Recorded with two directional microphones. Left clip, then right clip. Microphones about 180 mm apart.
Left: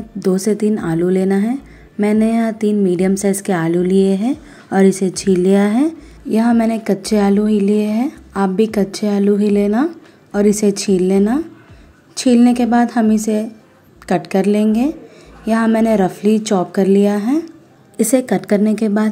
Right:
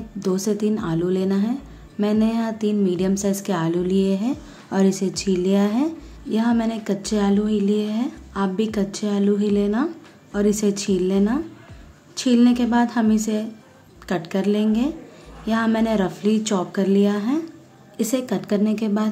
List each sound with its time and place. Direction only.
0.2 s a woman's voice: 30° left (ahead or behind)